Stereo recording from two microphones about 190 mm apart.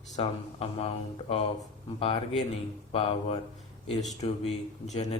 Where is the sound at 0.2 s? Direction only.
30° left (ahead or behind).